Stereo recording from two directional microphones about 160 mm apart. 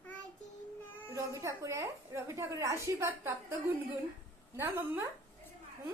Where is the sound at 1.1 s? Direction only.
20° right (ahead or behind).